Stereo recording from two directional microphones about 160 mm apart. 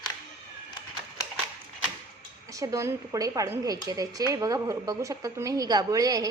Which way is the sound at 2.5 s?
20° right (ahead or behind).